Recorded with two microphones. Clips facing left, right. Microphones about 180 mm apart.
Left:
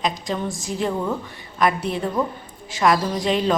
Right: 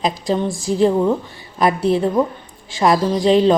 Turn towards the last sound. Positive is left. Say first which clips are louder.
# right 7 dB
turn(degrees=-30)  # may be behind; listen again after turning